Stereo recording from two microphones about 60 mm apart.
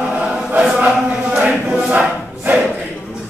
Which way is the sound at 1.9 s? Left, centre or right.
Right.